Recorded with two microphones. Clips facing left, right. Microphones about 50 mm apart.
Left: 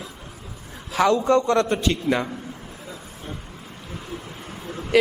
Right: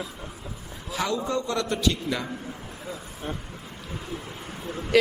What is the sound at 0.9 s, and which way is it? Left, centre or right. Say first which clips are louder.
Speech: left 9 dB; left.